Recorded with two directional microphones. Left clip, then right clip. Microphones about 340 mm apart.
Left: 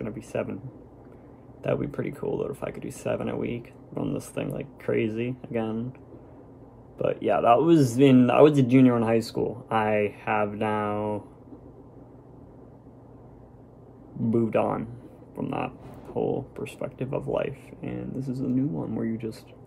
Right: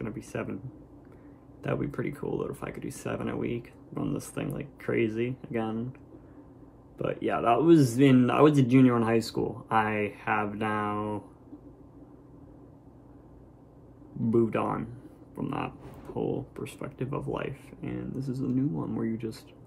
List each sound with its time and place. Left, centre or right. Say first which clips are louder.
0.0 s speech: left 5 dB; centre
1.6 s speech: left 4 dB; centre
7.0 s speech: left 6 dB; centre
14.3 s speech: left 2 dB; centre